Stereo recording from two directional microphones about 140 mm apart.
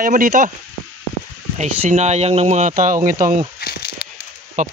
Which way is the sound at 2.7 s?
70° right (ahead or behind).